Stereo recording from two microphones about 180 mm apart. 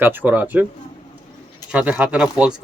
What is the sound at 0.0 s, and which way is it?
Speech, 10° right (ahead or behind).